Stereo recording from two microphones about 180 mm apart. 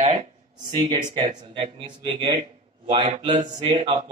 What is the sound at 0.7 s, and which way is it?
Speech, 25° right (ahead or behind).